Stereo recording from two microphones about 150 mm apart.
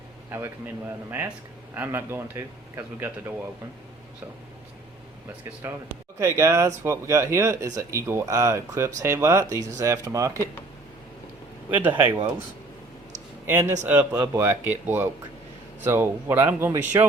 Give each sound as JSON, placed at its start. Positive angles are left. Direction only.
{"t": 0.3, "sound": "speech", "side_deg": -15}
{"t": 1.7, "sound": "speech", "side_deg": -15}
{"t": 6.1, "sound": "speech", "side_deg": -20}
{"t": 11.7, "sound": "speech", "side_deg": -10}
{"t": 13.5, "sound": "speech", "side_deg": -15}